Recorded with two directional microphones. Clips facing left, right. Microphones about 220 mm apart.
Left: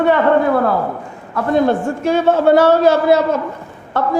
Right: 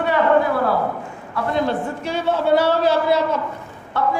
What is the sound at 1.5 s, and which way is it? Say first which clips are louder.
A man's voice: left 8 dB; 50° left (ahead or behind).